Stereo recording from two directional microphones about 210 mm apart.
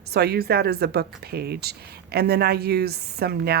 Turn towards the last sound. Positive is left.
turn(degrees=-50)  # may be behind; listen again after turning